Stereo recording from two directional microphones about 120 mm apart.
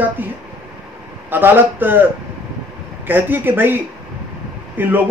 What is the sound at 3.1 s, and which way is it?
Speech, 15° right (ahead or behind).